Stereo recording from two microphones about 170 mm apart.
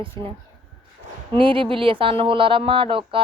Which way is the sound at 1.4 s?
30° right (ahead or behind).